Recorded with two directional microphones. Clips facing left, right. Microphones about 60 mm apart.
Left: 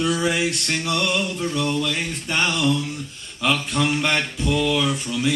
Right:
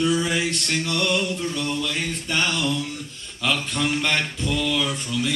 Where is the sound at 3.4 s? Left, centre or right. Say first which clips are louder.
Left 3 dB; centre.